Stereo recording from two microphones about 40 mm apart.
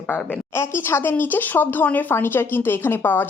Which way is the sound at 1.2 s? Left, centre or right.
Left.